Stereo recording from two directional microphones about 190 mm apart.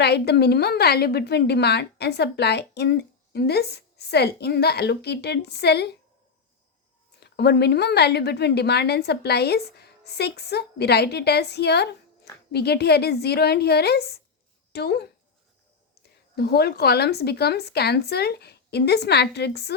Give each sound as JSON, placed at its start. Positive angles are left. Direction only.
{"t": 0.0, "sound": "a woman's voice", "side_deg": 60}
{"t": 7.2, "sound": "a woman's voice", "side_deg": 60}
{"t": 16.3, "sound": "a woman's voice", "side_deg": 55}